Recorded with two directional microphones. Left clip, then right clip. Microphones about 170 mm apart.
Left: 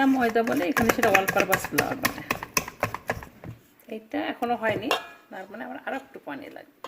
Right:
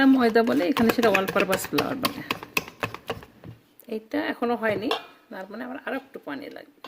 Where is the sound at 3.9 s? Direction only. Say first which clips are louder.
Right 2 dB; 70° right (ahead or behind).